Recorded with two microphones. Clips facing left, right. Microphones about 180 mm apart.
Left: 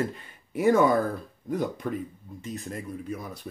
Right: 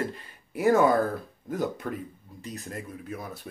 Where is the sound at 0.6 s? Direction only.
45° right (ahead or behind).